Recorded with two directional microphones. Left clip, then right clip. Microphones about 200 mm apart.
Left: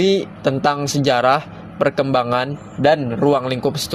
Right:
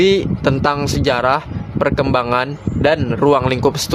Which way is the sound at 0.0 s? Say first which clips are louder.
Right 3 dB; 10° right (ahead or behind).